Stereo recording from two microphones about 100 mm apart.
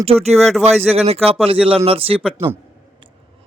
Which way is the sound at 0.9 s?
90° right.